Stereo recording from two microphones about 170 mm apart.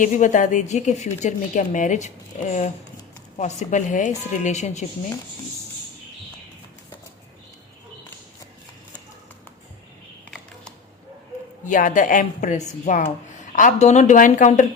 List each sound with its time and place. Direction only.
0.0 s a woman's voice: 50° left (ahead or behind)
11.6 s a woman's voice: 50° left (ahead or behind)